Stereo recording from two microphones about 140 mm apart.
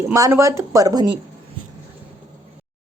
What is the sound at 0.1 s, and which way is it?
Speech, 20° right (ahead or behind).